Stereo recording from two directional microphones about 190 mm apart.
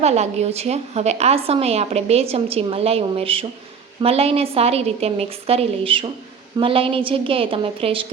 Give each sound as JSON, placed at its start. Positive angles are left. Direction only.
{"t": 0.0, "sound": "a woman's voice", "side_deg": -35}